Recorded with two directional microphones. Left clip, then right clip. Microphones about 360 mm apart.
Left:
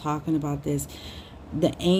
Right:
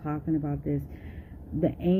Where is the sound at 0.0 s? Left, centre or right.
Centre.